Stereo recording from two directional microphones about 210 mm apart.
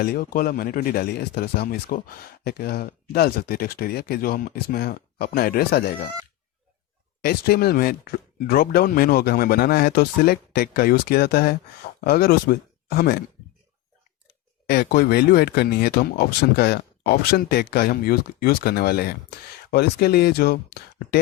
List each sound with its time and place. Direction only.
0.0 s speech: 45° left (ahead or behind)
7.2 s speech: 45° left (ahead or behind)
14.7 s speech: 50° left (ahead or behind)